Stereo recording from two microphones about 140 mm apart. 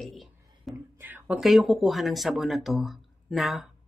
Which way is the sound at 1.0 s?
10° right (ahead or behind).